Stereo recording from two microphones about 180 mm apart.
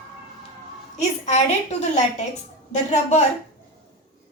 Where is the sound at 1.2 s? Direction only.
40° left (ahead or behind).